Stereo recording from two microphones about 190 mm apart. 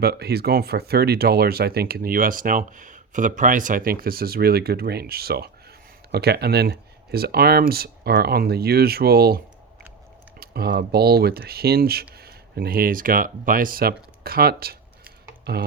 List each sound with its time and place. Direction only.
0.0 s speech: 55° right (ahead or behind)
10.4 s speech: 55° right (ahead or behind)